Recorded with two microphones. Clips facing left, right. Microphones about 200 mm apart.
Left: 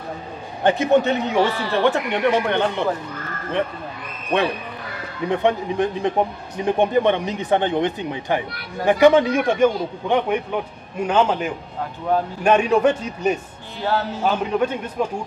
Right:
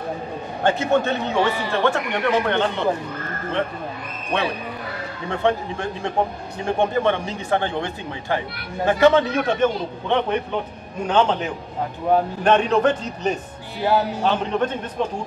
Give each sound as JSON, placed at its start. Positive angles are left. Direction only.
{"t": 0.7, "sound": "speech", "side_deg": 15}
{"t": 1.4, "sound": "speech", "side_deg": -15}
{"t": 1.8, "sound": "speech", "side_deg": 15}
{"t": 5.3, "sound": "speech", "side_deg": 15}
{"t": 13.7, "sound": "speech", "side_deg": -15}
{"t": 14.2, "sound": "speech", "side_deg": 10}